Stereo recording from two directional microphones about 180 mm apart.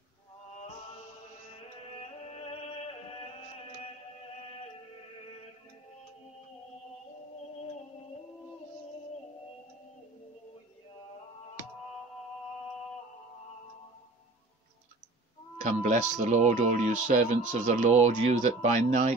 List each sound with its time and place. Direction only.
2.2 s music: 35° left (ahead or behind)
15.6 s speech: 45° right (ahead or behind)